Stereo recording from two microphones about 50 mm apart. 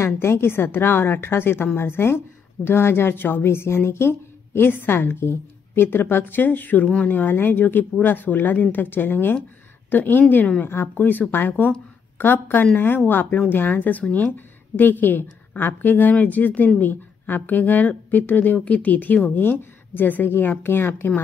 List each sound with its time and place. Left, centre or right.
0.0 s a woman's voice: left